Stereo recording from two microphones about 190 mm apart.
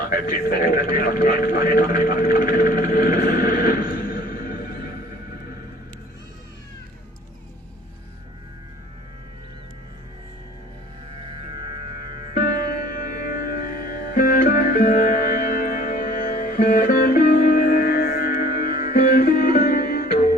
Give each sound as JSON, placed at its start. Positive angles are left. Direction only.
{"t": 0.1, "sound": "speech", "side_deg": 50}
{"t": 11.9, "sound": "music", "side_deg": 50}